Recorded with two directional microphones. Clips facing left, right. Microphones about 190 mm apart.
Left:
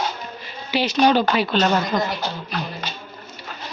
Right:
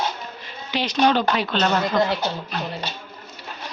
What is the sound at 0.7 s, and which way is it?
A woman's voice, 5° left (ahead or behind).